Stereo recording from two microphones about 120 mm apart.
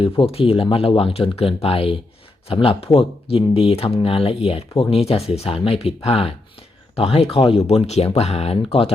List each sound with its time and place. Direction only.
0.0 s speech: 50° left (ahead or behind)